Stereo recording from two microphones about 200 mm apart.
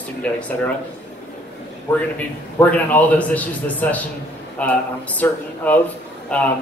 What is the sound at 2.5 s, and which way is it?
A man's voice, 10° left (ahead or behind).